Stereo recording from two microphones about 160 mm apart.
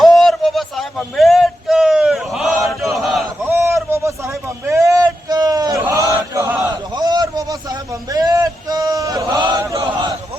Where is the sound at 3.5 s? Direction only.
15° right (ahead or behind).